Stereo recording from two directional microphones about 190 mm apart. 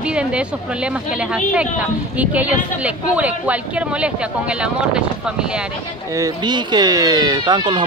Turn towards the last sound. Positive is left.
turn(degrees=-25)  # may be behind; listen again after turning